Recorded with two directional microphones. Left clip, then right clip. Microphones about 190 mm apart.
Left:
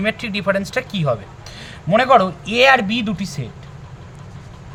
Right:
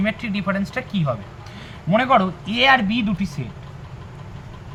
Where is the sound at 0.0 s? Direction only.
65° left (ahead or behind).